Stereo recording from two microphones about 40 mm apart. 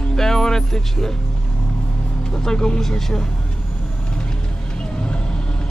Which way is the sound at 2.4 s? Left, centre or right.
Centre.